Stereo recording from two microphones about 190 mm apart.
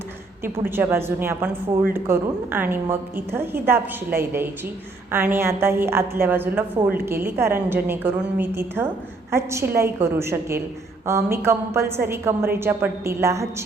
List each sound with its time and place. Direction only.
0.6 s a woman's voice: 10° right (ahead or behind)